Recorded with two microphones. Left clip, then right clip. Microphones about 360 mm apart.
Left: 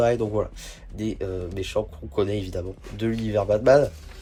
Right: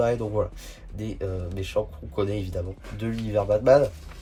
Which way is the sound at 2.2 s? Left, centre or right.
Centre.